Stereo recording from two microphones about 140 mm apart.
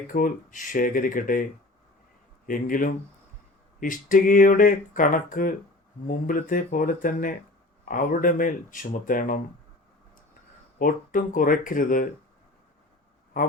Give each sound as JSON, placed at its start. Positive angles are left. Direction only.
{"t": 0.1, "sound": "speech", "side_deg": 70}
{"t": 2.5, "sound": "speech", "side_deg": 75}
{"t": 10.8, "sound": "speech", "side_deg": 75}